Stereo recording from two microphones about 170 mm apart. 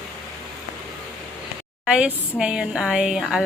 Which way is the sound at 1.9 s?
5° right (ahead or behind).